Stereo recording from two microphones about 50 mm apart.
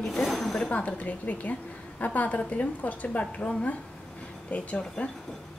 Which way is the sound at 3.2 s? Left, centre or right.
Left.